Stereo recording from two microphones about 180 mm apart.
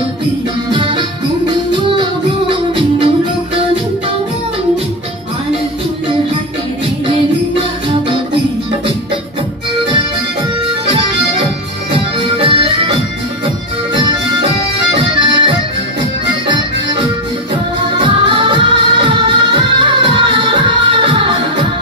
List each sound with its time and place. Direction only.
0.7 s music: 25° right (ahead or behind)
7.1 s music: 30° right (ahead or behind)
10.9 s accordion: 30° right (ahead or behind)
11.9 s music: 30° right (ahead or behind)
15.0 s accordion: 30° right (ahead or behind)
16.0 s music: 25° right (ahead or behind)